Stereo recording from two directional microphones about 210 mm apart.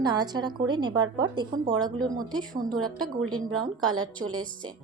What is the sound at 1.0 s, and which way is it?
Speech, 65° right (ahead or behind).